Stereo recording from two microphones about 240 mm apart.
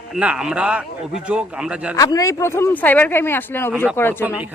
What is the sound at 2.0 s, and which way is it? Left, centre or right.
Speech, centre.